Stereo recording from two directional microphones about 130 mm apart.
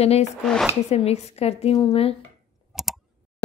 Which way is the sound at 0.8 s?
55° left (ahead or behind).